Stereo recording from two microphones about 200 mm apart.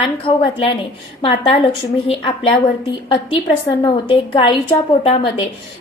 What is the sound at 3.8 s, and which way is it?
A woman's voice, 25° left (ahead or behind).